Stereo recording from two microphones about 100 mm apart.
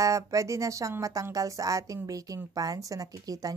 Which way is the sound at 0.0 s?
30° right (ahead or behind).